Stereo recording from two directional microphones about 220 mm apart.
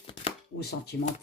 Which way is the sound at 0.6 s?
45° left (ahead or behind).